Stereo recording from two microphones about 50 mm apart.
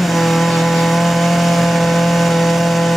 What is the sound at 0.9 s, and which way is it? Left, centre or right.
Chainsaw, centre.